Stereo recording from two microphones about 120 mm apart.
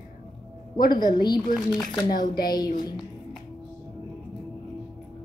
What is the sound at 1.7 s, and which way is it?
Speech, 5° left (ahead or behind).